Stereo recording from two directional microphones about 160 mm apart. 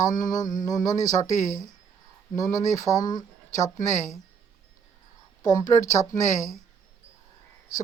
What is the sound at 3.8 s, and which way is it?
Speech, 50° left (ahead or behind).